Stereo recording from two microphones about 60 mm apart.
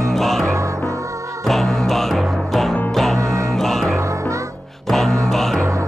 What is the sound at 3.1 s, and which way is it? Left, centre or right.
Music, right.